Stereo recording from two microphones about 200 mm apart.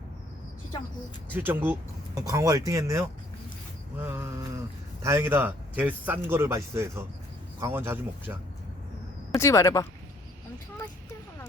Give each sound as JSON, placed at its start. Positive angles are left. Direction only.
{"t": 1.3, "sound": "speech", "side_deg": -10}
{"t": 4.0, "sound": "a sound", "side_deg": -15}
{"t": 5.0, "sound": "speech", "side_deg": -10}
{"t": 9.3, "sound": "speech", "side_deg": 15}